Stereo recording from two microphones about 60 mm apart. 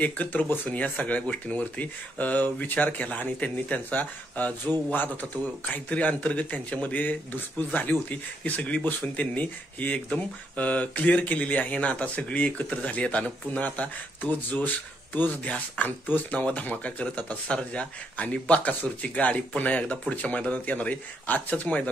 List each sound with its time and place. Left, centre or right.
0.0 s speech: left